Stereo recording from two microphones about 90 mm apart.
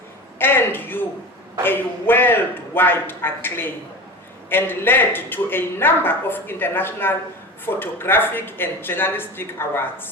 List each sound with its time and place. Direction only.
0.3 s a woman's voice: 25° left (ahead or behind)